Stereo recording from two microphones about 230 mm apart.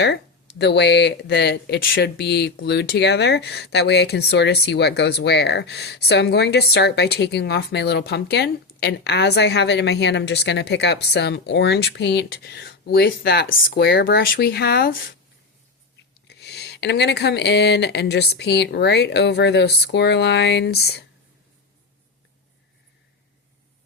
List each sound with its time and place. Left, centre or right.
0.6 s speech: left
16.2 s speech: left